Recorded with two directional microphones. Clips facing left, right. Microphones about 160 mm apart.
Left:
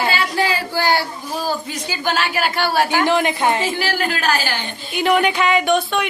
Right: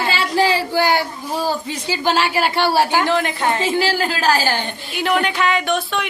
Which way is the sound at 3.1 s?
15° left (ahead or behind).